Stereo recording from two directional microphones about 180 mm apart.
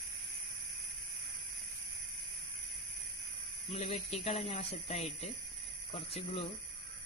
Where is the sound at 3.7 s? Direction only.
35° left (ahead or behind).